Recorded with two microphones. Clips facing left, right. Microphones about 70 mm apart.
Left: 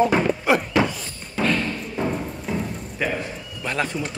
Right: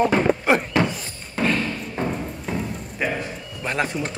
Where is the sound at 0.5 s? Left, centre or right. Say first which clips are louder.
Left 1 dB; right.